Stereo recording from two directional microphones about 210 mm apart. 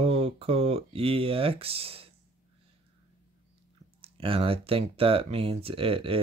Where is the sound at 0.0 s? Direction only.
25° right (ahead or behind).